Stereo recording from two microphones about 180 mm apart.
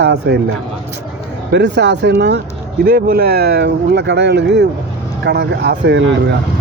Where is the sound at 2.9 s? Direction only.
55° right (ahead or behind).